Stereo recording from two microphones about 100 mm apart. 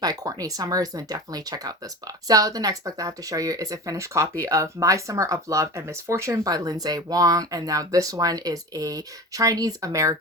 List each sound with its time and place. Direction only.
0.0 s speech: 40° right (ahead or behind)